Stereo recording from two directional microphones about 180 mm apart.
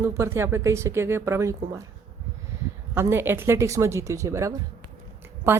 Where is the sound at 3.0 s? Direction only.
15° right (ahead or behind).